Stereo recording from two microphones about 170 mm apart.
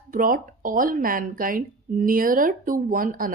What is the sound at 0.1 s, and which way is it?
A woman's voice, 55° right (ahead or behind).